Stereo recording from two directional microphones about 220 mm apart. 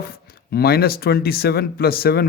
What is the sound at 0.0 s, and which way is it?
A man's voice, 45° left (ahead or behind).